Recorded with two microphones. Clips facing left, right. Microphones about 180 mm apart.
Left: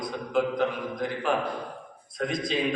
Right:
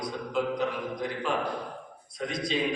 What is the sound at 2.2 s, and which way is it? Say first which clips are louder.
Speech: left 3 dB; 50° left (ahead or behind).